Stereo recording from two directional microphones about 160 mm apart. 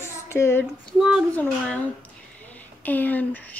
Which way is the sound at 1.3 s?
10° left (ahead or behind).